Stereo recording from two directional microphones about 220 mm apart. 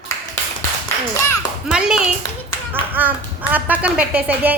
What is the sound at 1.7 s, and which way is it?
Speech, 5° right (ahead or behind).